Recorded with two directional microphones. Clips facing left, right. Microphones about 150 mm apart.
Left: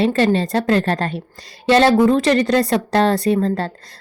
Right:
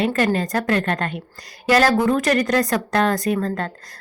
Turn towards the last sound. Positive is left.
turn(degrees=30)  # may be behind; listen again after turning